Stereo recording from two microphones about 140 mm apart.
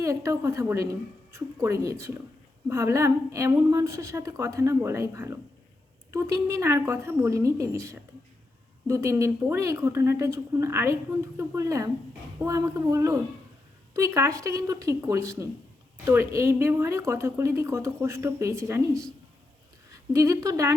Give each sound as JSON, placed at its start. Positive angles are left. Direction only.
{"t": 0.0, "sound": "speech", "side_deg": -20}